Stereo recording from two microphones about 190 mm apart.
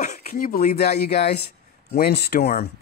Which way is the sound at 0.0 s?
40° left (ahead or behind).